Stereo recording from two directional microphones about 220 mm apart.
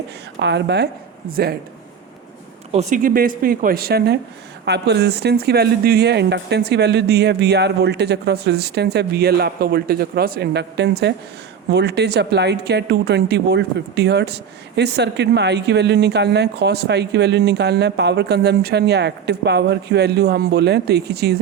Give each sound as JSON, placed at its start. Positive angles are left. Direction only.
{"t": 0.3, "sound": "speech", "side_deg": -50}
{"t": 2.7, "sound": "speech", "side_deg": -35}